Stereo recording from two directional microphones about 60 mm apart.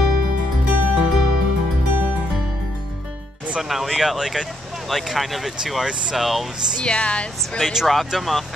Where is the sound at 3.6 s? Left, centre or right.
Centre.